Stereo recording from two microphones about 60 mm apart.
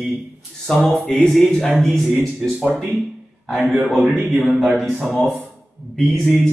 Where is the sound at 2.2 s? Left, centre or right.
Centre.